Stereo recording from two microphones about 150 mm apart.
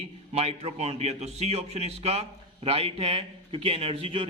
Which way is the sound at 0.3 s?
45° right (ahead or behind).